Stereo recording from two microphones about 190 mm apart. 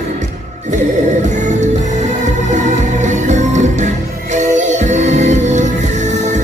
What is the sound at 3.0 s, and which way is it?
Music, 40° right (ahead or behind).